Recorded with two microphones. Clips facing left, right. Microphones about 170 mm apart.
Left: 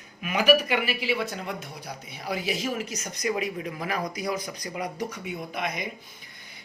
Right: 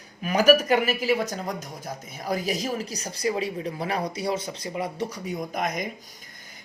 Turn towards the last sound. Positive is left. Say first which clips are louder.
# right 3 dB
turn(degrees=-45)  # may be behind; listen again after turning